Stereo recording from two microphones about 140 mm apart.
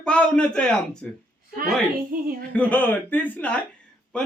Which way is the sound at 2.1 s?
90° right.